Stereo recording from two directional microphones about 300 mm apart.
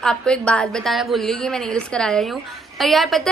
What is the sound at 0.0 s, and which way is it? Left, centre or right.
A woman's voice, centre.